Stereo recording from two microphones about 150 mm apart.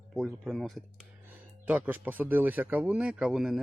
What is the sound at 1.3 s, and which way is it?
Speech, 10° right (ahead or behind).